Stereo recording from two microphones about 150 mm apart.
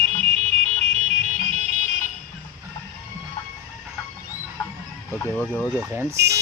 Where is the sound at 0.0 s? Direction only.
45° right (ahead or behind).